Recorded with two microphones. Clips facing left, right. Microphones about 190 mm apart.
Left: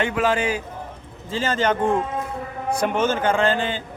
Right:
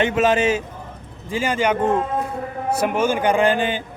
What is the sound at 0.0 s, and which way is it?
A man's voice, 20° right (ahead or behind).